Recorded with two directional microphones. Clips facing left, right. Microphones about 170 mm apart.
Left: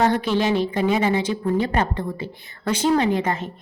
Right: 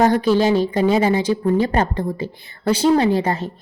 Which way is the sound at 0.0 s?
35° right (ahead or behind).